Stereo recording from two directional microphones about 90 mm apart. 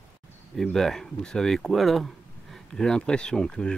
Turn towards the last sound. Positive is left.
turn(degrees=10)  # may be behind; listen again after turning